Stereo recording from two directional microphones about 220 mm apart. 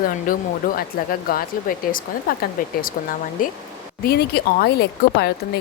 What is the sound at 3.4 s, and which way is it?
Speech, 40° left (ahead or behind).